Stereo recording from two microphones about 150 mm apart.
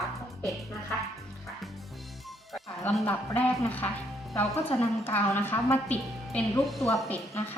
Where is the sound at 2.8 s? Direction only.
10° left (ahead or behind).